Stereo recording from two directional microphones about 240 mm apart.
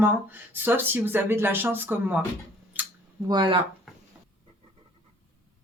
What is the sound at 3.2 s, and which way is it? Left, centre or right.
Speech, centre.